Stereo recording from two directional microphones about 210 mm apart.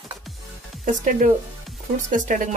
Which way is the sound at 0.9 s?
40° right (ahead or behind).